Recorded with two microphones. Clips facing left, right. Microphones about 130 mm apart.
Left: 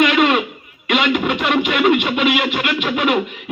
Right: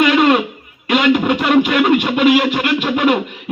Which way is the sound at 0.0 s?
40° right (ahead or behind).